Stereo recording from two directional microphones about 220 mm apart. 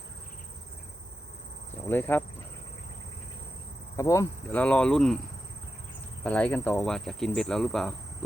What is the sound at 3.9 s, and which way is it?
Speech, 15° left (ahead or behind).